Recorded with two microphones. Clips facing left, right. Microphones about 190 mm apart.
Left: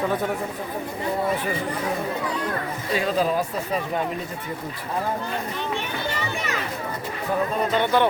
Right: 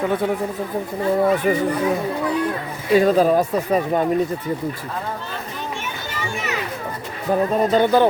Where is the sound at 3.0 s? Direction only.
45° right (ahead or behind).